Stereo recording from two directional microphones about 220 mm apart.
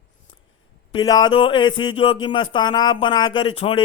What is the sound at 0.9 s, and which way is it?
Speech, 20° left (ahead or behind).